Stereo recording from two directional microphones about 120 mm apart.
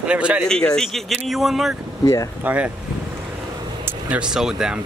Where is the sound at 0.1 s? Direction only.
10° right (ahead or behind).